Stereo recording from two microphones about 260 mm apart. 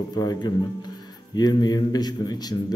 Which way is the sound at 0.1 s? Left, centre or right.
Centre.